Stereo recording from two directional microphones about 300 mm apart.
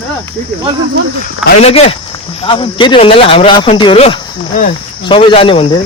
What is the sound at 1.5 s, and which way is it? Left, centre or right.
Speech, left.